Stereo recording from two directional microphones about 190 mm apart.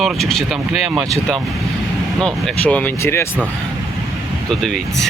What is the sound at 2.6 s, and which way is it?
Speech, 10° left (ahead or behind).